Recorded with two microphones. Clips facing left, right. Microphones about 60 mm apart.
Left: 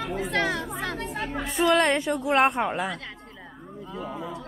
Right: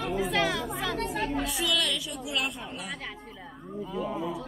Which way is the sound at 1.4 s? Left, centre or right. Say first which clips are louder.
Left 8 dB; left.